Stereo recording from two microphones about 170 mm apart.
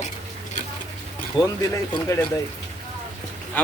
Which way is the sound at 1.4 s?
25° left (ahead or behind).